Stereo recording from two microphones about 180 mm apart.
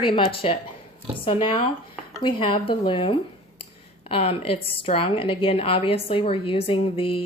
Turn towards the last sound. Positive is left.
turn(degrees=30)  # may be behind; listen again after turning